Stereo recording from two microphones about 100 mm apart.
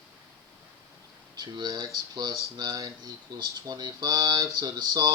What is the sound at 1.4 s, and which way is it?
Speech, 45° right (ahead or behind).